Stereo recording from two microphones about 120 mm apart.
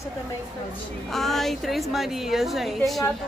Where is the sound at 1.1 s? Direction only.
Centre (ahead or behind).